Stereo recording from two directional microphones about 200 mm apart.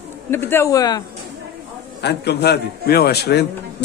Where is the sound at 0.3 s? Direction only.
10° left (ahead or behind).